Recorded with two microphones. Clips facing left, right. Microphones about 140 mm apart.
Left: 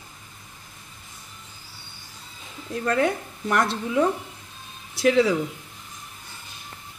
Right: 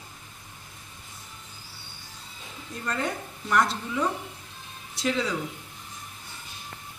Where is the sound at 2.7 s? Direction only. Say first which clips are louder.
Left 8 dB; 70° left (ahead or behind).